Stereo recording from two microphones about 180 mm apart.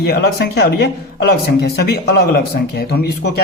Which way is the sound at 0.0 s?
65° left (ahead or behind).